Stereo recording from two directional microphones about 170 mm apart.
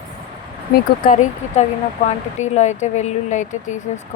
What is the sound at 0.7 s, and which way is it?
A woman's voice, 50° left (ahead or behind).